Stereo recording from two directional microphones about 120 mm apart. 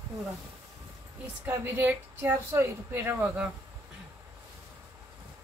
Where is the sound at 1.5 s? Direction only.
15° right (ahead or behind).